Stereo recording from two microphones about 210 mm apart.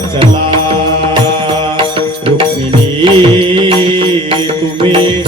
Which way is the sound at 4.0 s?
25° right (ahead or behind).